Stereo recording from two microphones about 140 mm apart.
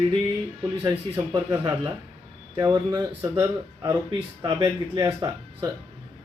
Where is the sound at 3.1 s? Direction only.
20° right (ahead or behind).